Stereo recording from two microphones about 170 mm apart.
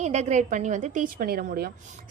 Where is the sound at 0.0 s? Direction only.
45° right (ahead or behind).